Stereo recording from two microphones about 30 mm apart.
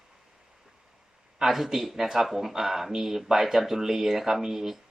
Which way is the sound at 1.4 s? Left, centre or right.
Centre.